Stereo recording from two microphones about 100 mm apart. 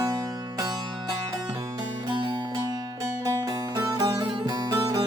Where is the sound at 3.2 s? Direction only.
35° right (ahead or behind).